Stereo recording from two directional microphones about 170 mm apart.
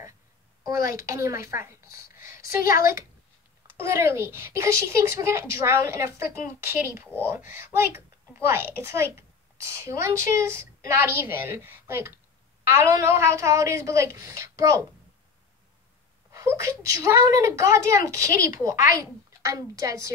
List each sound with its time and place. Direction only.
0.7 s a child's voice: 20° right (ahead or behind)
16.3 s a child's voice: 15° right (ahead or behind)